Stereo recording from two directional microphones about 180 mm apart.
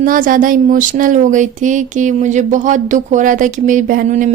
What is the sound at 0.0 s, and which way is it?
Speech, 50° right (ahead or behind).